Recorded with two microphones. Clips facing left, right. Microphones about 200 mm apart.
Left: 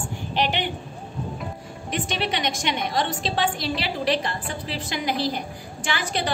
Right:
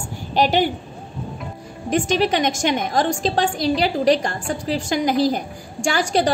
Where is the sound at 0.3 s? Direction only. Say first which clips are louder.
Right 8 dB; 40° right (ahead or behind).